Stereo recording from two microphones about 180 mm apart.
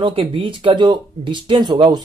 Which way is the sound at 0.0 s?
30° right (ahead or behind).